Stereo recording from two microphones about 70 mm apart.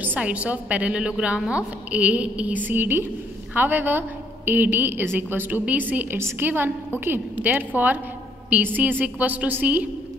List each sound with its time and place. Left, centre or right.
0.0 s a woman's voice: right